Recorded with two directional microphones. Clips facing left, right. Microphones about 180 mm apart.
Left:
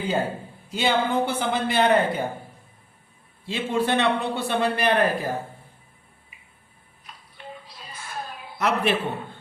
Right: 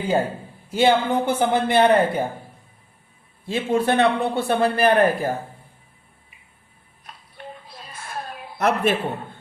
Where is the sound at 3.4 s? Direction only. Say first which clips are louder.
Right 4 dB; 50° right (ahead or behind).